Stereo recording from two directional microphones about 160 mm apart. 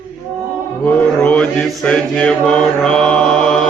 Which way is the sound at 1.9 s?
5° left (ahead or behind).